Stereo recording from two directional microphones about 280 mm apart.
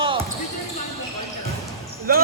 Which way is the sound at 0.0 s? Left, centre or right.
Centre.